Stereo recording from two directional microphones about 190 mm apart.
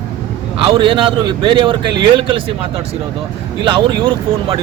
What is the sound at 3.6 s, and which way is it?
Speech, 25° right (ahead or behind).